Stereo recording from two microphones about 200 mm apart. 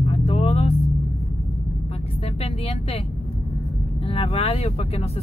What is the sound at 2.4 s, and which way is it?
Speech, 30° left (ahead or behind).